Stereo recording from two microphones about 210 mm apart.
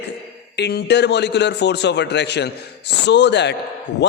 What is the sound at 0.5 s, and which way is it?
A man's voice, 50° left (ahead or behind).